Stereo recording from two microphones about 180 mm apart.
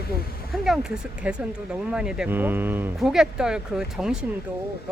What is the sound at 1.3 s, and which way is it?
Speech, 10° right (ahead or behind).